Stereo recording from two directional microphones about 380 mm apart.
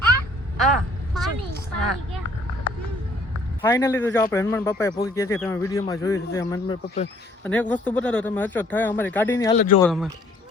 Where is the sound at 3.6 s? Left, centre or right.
Centre.